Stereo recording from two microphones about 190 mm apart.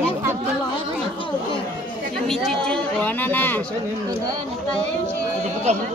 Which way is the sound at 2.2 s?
Centre (ahead or behind).